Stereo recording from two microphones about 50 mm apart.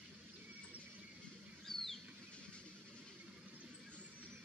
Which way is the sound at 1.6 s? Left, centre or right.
Centre.